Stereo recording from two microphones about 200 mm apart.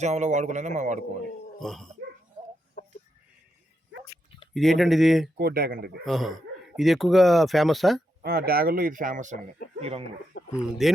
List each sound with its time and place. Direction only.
0.0 s a man's voice: 35° right (ahead or behind)
1.5 s speech: centre (ahead or behind)
4.5 s speech: centre (ahead or behind)
5.4 s speech: 50° right (ahead or behind)
6.1 s speech: centre (ahead or behind)
8.2 s speech: 50° right (ahead or behind)
10.3 s a sound: 55° left (ahead or behind)
10.8 s speech: centre (ahead or behind)